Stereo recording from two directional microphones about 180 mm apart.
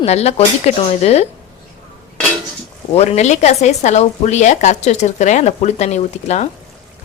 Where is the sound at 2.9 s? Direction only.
40° left (ahead or behind).